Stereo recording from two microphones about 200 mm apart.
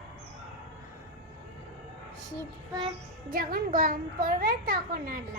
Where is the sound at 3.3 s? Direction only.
45° right (ahead or behind).